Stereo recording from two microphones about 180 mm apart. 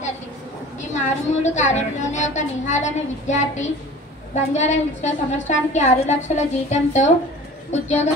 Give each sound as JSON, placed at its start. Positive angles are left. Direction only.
{"t": 0.7, "sound": "a woman's voice", "side_deg": 40}